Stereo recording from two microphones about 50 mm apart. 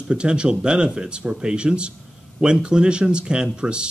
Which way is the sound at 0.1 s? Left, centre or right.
Centre.